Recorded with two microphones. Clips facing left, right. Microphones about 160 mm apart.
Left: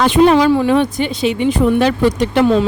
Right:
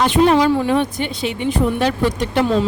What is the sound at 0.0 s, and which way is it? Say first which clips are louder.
Speech: left 3 dB; 90° left.